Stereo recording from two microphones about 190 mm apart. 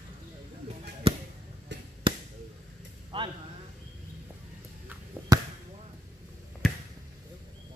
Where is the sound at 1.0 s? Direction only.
30° right (ahead or behind).